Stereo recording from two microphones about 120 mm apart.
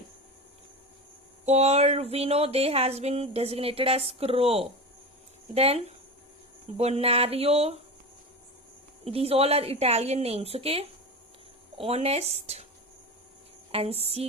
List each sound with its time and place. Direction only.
1.5 s speech: 65° right (ahead or behind)
9.0 s speech: 55° right (ahead or behind)
13.7 s music: 55° right (ahead or behind)